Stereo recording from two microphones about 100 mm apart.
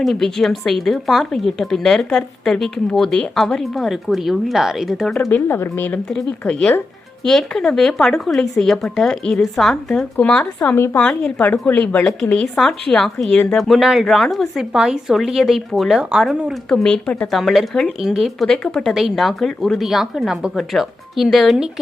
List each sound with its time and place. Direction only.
0.0 s a woman's voice: 5° left (ahead or behind)
5.1 s a woman's voice: 10° left (ahead or behind)
5.5 s speech: 20° left (ahead or behind)
6.1 s a woman's voice: 5° left (ahead or behind)
16.6 s a woman's voice: 5° left (ahead or behind)
17.3 s a woman's voice: centre (ahead or behind)